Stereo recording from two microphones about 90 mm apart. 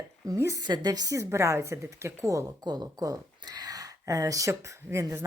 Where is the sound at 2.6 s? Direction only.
45° right (ahead or behind); by 5.2 s 30° right (ahead or behind).